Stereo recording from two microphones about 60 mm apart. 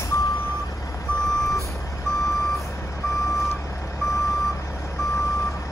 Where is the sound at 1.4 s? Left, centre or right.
Left.